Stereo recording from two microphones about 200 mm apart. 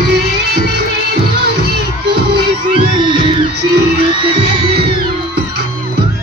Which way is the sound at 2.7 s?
25° right (ahead or behind).